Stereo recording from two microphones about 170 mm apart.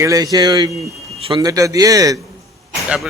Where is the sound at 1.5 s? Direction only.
20° right (ahead or behind).